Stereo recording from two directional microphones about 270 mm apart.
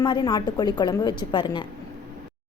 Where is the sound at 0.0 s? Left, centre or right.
Centre.